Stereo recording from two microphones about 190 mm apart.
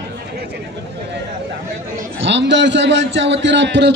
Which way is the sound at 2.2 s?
70° right (ahead or behind).